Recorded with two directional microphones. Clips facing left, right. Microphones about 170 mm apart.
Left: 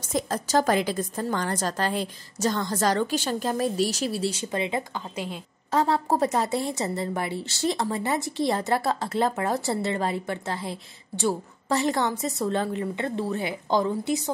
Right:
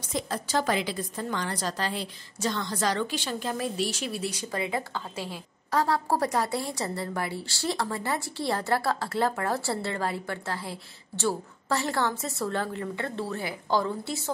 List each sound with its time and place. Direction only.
0.0 s a woman's voice: 45° left (ahead or behind); by 14.3 s 15° left (ahead or behind)